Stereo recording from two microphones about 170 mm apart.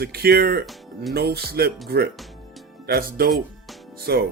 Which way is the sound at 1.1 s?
70° right (ahead or behind).